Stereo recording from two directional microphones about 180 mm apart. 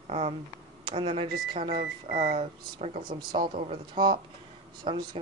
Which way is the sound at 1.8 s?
50° right (ahead or behind).